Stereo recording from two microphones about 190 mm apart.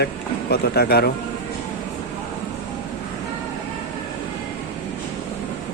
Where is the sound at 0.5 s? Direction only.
55° left (ahead or behind).